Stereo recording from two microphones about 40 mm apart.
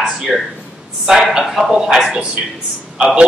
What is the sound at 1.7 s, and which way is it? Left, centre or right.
Speech, centre.